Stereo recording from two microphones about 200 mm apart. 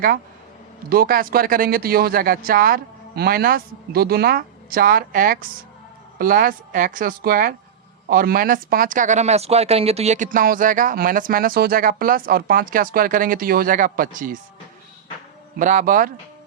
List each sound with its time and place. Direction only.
0.9 s speech: 45° right (ahead or behind)
15.5 s speech: 40° right (ahead or behind)